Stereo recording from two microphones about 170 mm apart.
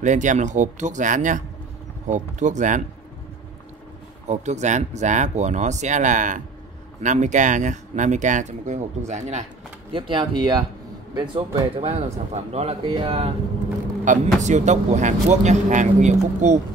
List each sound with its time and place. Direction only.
0.0 s speech: 45° right (ahead or behind)
4.3 s speech: 45° right (ahead or behind)
9.9 s speech: 30° right (ahead or behind)
14.0 s speech: 45° right (ahead or behind)